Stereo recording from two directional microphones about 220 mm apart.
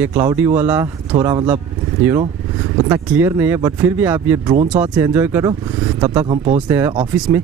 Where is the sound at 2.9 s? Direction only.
10° right (ahead or behind).